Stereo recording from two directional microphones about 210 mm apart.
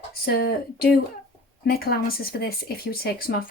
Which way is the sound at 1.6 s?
45° left (ahead or behind).